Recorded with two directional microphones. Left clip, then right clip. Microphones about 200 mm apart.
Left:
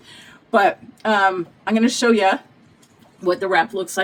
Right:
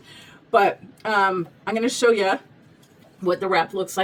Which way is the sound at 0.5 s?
20° left (ahead or behind).